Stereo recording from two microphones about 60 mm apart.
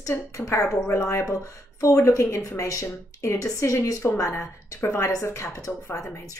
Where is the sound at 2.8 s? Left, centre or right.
Left.